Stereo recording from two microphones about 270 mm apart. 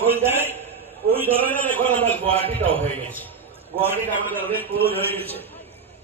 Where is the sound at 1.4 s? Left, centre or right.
Centre.